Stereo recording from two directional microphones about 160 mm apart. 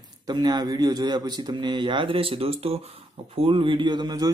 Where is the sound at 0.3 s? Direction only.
25° right (ahead or behind).